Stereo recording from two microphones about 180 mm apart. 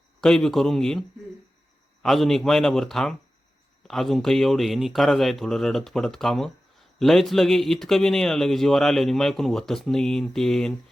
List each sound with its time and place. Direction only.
0.2 s speech: 5° left (ahead or behind)